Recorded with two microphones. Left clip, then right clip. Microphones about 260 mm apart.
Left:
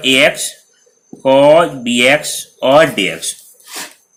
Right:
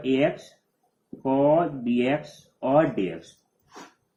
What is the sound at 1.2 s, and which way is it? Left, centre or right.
Speech, left.